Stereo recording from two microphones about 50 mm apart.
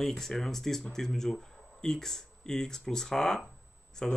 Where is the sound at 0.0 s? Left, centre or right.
Centre.